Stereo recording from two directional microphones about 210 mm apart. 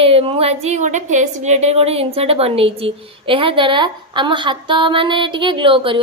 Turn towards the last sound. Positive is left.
turn(degrees=-25)  # may be behind; listen again after turning